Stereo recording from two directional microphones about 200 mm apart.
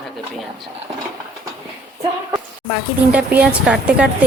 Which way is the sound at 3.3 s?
5° right (ahead or behind).